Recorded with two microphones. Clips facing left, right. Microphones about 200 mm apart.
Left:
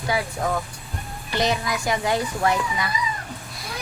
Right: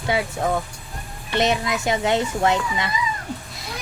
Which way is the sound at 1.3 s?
25° right (ahead or behind).